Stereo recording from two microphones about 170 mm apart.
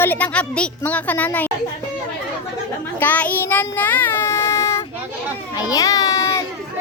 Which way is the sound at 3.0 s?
10° left (ahead or behind).